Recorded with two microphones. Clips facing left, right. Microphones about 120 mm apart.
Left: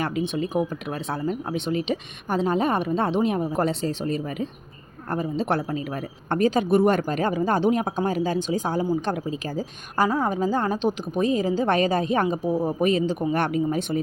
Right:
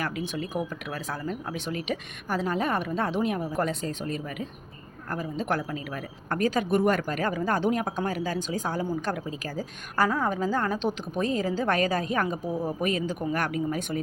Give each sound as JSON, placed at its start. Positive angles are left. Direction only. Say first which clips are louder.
{"t": 0.0, "sound": "speech", "louder": "left 6 dB", "side_deg": 25}